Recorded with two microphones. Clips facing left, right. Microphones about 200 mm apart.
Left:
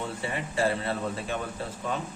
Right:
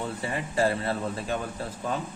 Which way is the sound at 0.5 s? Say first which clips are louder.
Right 2 dB; 40° right (ahead or behind).